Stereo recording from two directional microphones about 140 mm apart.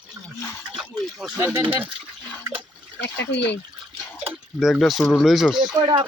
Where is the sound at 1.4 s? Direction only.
15° right (ahead or behind).